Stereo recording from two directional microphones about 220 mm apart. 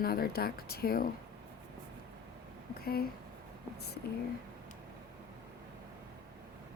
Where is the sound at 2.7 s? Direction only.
45° left (ahead or behind).